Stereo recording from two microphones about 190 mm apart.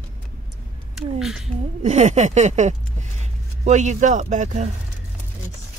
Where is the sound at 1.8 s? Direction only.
35° right (ahead or behind).